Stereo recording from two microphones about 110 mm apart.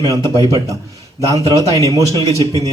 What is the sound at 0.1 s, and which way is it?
A man's voice, 30° right (ahead or behind).